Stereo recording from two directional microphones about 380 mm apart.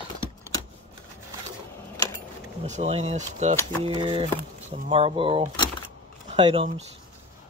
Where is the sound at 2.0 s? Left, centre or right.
Centre.